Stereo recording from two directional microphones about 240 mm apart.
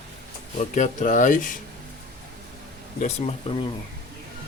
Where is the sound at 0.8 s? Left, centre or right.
Left.